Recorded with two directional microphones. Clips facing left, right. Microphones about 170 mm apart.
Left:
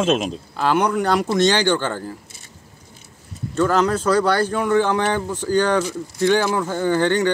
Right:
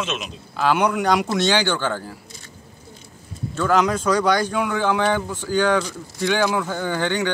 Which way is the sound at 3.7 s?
10° right (ahead or behind).